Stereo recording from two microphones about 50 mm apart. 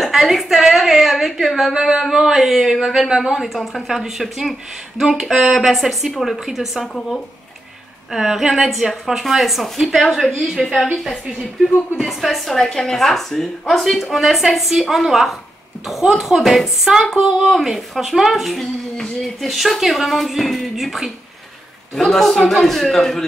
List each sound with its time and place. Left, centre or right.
0.0 s a woman's voice: centre
8.1 s a woman's voice: centre
12.0 s a woman's voice: centre